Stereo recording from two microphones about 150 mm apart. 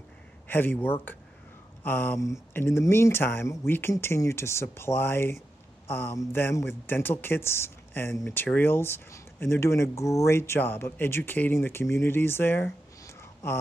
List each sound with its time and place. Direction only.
0.5 s speech: 10° left (ahead or behind)